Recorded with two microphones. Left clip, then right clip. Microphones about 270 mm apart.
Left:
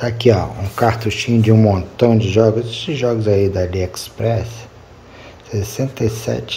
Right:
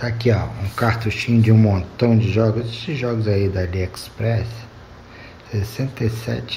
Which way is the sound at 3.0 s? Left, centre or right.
Left.